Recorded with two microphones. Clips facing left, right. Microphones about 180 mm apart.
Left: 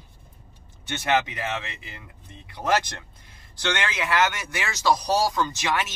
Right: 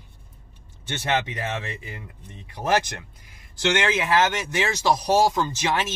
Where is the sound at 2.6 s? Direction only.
20° right (ahead or behind).